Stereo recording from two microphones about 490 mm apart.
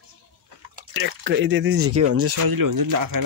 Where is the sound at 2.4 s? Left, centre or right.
Right.